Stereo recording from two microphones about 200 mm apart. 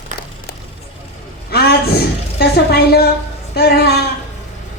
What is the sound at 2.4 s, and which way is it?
A woman's voice, 50° left (ahead or behind).